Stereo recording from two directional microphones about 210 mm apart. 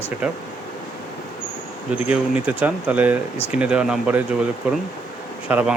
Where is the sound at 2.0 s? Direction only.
5° right (ahead or behind).